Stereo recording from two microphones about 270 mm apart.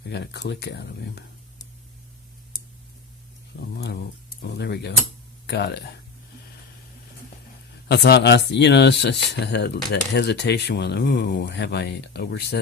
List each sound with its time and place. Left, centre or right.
0.1 s speech: left
4.4 s speech: left
7.9 s speech: left